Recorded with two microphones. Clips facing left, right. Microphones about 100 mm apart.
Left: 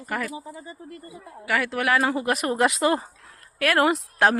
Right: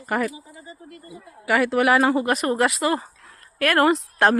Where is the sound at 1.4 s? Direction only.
10° right (ahead or behind); by 2.5 s 5° left (ahead or behind).